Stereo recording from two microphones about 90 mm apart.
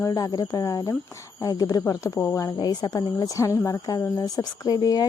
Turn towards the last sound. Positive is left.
turn(degrees=45)  # may be behind; listen again after turning